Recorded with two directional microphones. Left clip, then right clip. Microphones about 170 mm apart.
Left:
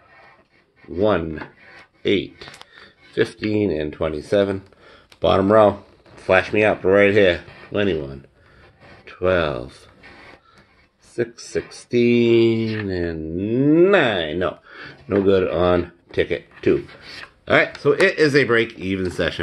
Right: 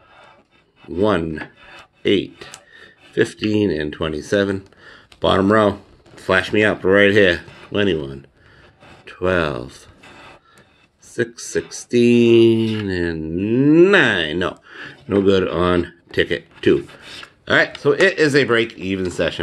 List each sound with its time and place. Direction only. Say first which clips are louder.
0.9 s mantra: right 1 dB; 45° right (ahead or behind)
3.2 s speech: right 2 dB; 45° right (ahead or behind)
5.4 s speech: left 4 dB; 40° right (ahead or behind)
11.3 s mantra: right 3 dB; 45° right (ahead or behind)
17.5 s speech: right 1 dB; 20° right (ahead or behind)